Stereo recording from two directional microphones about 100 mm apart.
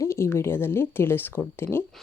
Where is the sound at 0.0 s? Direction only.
25° left (ahead or behind).